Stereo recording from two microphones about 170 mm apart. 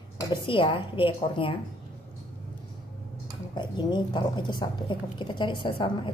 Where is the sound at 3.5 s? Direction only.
25° left (ahead or behind).